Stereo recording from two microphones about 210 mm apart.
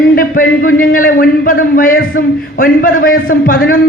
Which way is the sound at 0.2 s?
40° left (ahead or behind).